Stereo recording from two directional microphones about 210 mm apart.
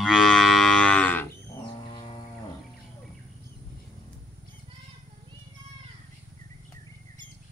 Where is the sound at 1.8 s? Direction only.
25° left (ahead or behind).